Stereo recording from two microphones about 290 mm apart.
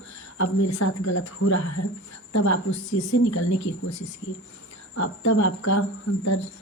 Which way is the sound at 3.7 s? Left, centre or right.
Left.